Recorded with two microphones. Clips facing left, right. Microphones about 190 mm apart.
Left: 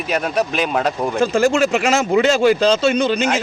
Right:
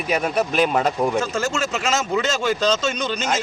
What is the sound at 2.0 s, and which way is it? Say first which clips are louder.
Speech: left 8 dB; 55° left (ahead or behind).